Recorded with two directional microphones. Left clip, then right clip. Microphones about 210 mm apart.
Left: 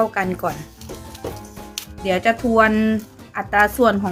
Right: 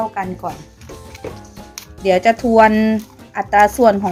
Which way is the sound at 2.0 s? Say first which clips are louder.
Right 5 dB; 15° right (ahead or behind).